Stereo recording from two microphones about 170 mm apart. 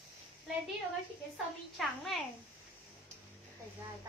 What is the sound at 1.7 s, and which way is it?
Child singing, centre (ahead or behind).